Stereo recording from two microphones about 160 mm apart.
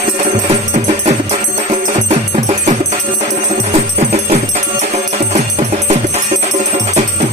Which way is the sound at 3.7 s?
40° right (ahead or behind).